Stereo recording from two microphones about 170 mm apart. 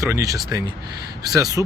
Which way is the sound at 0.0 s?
20° right (ahead or behind).